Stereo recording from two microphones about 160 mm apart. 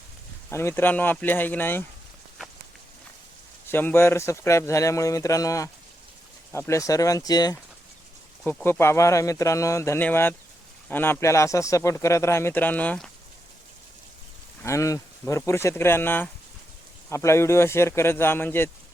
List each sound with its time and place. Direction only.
0.5 s speech: 15° left (ahead or behind)
3.7 s speech: 15° left (ahead or behind)
8.6 s speech: 15° left (ahead or behind)
14.6 s speech: 20° left (ahead or behind)